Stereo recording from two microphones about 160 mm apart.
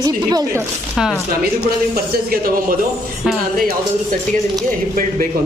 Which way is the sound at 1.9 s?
65° right (ahead or behind).